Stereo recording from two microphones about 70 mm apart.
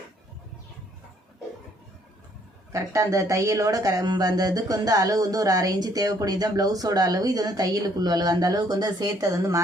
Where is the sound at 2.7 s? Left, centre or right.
Right.